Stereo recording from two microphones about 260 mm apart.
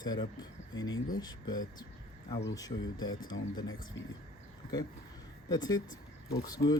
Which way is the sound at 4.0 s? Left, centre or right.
Left.